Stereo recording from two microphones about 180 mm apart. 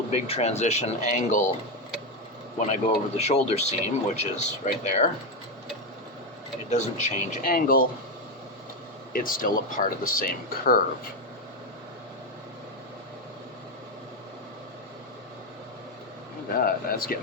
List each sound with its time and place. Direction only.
0.1 s speech: 35° left (ahead or behind)
2.7 s speech: 35° left (ahead or behind)
6.7 s speech: 40° left (ahead or behind)
9.1 s speech: 50° left (ahead or behind)
16.6 s speech: 55° left (ahead or behind)